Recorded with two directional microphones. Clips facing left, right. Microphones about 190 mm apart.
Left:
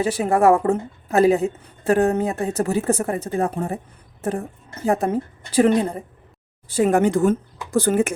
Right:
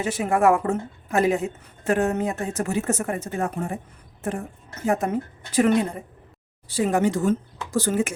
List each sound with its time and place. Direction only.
0.0 s a woman's voice: 35° left (ahead or behind)
6.7 s speech: 50° left (ahead or behind)